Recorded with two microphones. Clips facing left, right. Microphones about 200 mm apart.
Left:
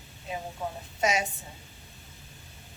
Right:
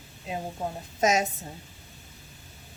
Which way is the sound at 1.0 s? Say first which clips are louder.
Right 4 dB; 45° right (ahead or behind).